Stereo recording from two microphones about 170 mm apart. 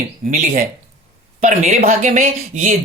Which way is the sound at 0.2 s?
40° right (ahead or behind).